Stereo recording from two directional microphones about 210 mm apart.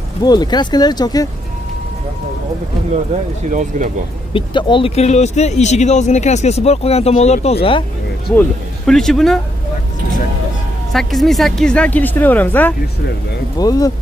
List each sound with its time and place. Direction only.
0.2 s speech: 20° left (ahead or behind)
3.5 s speech: 35° right (ahead or behind)
4.3 s speech: 25° left (ahead or behind)
8.4 s speech: 5° left (ahead or behind)
10.9 s a woman's voice: centre (ahead or behind); by 13.9 s 15° left (ahead or behind)